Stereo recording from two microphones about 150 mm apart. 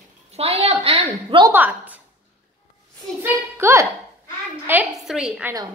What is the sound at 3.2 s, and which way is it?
A woman's voice, 20° right (ahead or behind).